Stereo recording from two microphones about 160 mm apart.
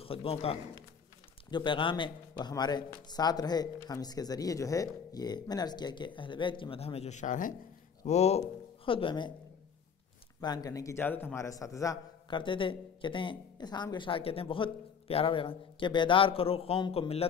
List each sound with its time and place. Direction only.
0.0 s a man's voice: 35° left (ahead or behind); by 7.5 s 55° left (ahead or behind)
8.0 s speech: 45° left (ahead or behind)
10.4 s a man's voice: 25° left (ahead or behind)
12.3 s speech: 30° left (ahead or behind)